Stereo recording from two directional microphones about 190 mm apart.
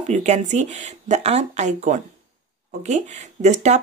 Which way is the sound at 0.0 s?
35° right (ahead or behind).